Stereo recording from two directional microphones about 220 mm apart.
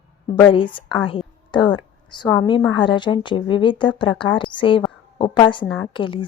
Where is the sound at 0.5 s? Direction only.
20° left (ahead or behind).